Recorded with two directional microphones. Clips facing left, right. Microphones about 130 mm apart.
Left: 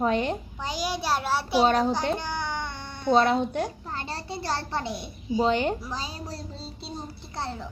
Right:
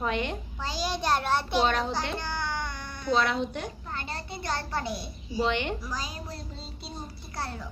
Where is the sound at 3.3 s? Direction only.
50° left (ahead or behind).